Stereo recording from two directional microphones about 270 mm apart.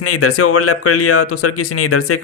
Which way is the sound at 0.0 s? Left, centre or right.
Left.